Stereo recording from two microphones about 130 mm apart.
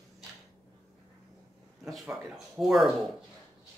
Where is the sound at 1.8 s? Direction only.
Centre (ahead or behind).